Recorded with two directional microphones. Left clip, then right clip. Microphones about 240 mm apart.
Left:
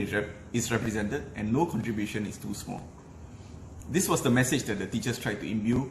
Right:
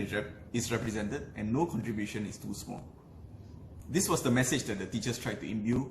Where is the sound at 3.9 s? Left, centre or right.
Centre.